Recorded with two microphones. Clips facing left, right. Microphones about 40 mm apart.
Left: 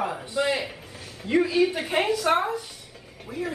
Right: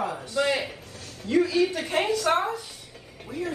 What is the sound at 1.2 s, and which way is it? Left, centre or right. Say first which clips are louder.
A woman's voice: left 1 dB; left.